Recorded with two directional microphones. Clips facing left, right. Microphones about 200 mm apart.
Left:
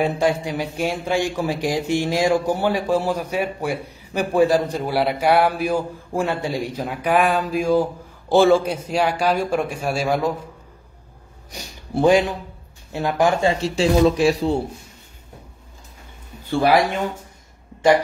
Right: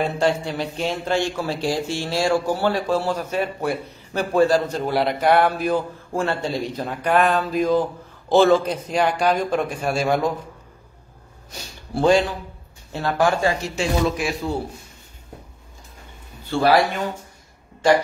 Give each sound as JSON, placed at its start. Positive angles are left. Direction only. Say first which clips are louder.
{"t": 0.0, "sound": "a man's voice", "louder": "left 1 dB", "side_deg": 15}
{"t": 11.5, "sound": "speech", "louder": "left 3 dB", "side_deg": 15}